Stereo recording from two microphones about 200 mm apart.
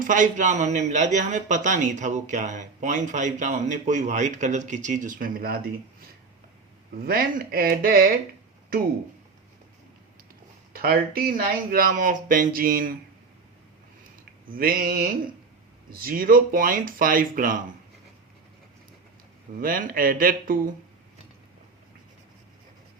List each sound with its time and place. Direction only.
0.0 s speech: 40° right (ahead or behind)
10.7 s speech: 50° right (ahead or behind)
14.5 s speech: 45° right (ahead or behind)
19.5 s speech: 45° right (ahead or behind)